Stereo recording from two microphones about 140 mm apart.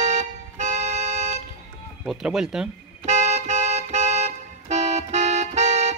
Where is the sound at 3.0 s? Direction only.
55° right (ahead or behind).